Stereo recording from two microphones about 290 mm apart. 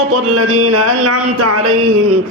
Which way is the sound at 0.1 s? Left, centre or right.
Right.